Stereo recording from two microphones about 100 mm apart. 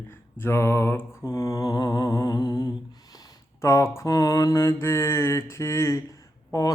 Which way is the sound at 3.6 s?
30° left (ahead or behind).